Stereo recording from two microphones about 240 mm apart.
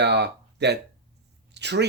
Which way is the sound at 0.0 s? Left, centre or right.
Right.